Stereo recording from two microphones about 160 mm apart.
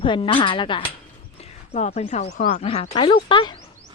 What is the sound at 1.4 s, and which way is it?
A woman's voice, 40° left (ahead or behind).